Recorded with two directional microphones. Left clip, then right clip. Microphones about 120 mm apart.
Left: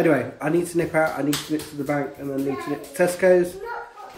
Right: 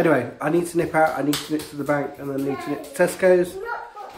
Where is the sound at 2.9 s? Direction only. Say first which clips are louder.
Even; 20° right (ahead or behind).